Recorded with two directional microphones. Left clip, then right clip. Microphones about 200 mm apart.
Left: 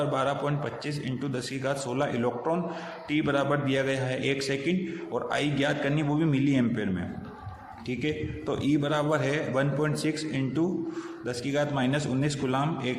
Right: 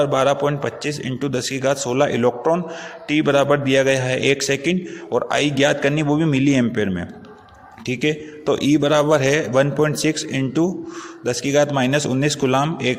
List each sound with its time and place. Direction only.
0.0 s a man's voice: 40° right (ahead or behind)